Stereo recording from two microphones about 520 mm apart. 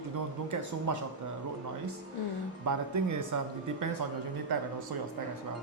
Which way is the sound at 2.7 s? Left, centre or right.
Right.